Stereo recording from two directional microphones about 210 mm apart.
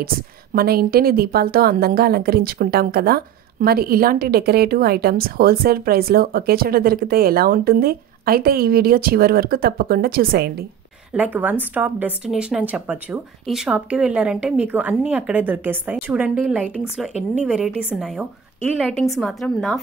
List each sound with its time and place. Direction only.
0.0 s a woman's voice: 45° right (ahead or behind)
11.1 s a woman's voice: 5° right (ahead or behind)